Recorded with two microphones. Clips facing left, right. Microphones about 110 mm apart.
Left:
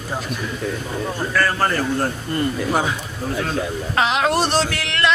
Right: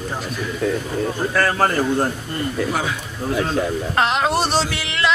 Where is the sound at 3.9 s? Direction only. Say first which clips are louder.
Left 1 dB; centre (ahead or behind).